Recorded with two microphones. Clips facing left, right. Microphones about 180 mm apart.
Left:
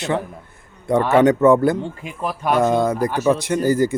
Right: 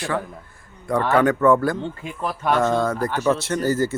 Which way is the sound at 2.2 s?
10° left (ahead or behind).